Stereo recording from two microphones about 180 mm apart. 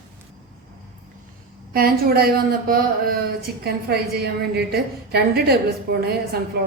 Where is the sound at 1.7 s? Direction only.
55° right (ahead or behind).